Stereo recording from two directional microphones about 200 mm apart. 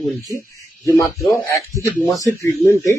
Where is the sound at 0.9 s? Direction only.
15° left (ahead or behind).